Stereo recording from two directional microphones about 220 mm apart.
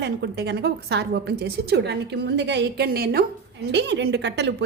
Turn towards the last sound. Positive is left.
turn(degrees=-50)  # may be behind; listen again after turning